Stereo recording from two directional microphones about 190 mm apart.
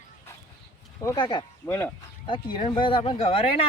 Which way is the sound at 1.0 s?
20° left (ahead or behind).